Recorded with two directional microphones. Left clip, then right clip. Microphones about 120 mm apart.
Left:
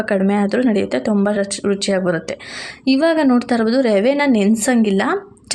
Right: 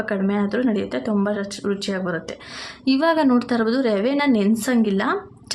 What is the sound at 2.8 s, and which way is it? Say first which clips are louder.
A woman's voice: left 3 dB; 25° left (ahead or behind).